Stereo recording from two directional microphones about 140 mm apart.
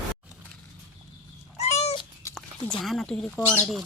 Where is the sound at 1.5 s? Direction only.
50° left (ahead or behind).